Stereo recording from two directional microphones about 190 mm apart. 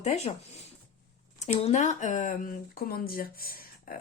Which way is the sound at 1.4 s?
35° left (ahead or behind).